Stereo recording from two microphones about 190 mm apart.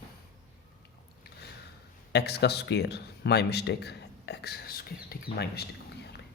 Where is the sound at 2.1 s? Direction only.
60° left (ahead or behind).